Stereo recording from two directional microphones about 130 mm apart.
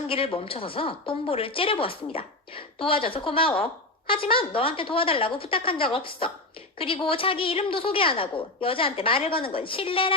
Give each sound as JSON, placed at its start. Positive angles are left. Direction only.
{"t": 0.1, "sound": "a woman's voice", "side_deg": 45}